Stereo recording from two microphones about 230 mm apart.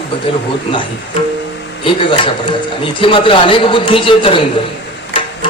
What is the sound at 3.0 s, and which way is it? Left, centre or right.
Speech, left.